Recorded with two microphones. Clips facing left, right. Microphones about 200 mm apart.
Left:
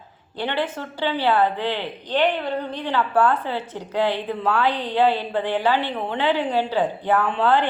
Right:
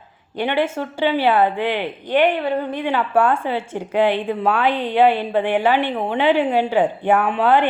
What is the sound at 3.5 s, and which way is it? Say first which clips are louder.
A woman's voice: right 5 dB; 15° right (ahead or behind).